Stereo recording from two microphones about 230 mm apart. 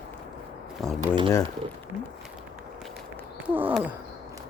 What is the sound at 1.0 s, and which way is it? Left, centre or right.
Speech, right.